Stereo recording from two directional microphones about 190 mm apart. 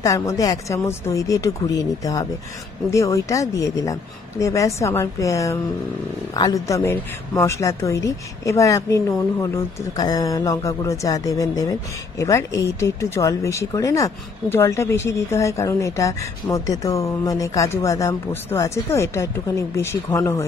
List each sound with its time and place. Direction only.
0.0 s speech: 15° left (ahead or behind)